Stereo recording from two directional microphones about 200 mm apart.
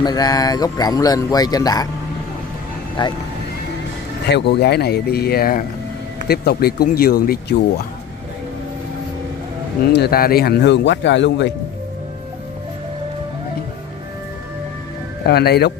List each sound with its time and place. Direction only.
0.0 s speech: 20° left (ahead or behind)
3.0 s speech: 25° left (ahead or behind)
4.3 s speech: 60° left (ahead or behind)
9.9 s speech: 50° left (ahead or behind)
15.2 s speech: 55° left (ahead or behind)